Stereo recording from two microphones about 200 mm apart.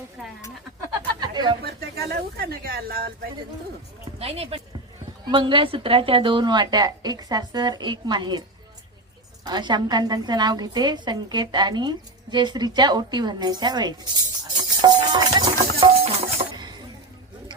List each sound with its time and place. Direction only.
1.2 s a sound: 20° right (ahead or behind)
1.6 s speech: 50° right (ahead or behind)
4.2 s a woman's voice: 30° right (ahead or behind)